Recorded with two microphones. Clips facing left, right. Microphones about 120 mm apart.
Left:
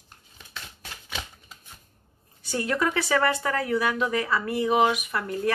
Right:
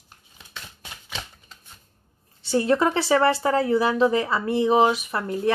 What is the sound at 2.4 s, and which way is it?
A woman's voice, 30° right (ahead or behind).